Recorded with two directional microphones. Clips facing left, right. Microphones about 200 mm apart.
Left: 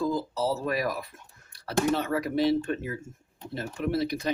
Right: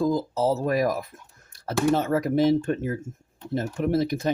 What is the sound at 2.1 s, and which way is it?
Speech, 45° right (ahead or behind).